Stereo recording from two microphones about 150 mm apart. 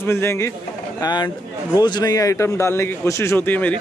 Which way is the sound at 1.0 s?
30° left (ahead or behind).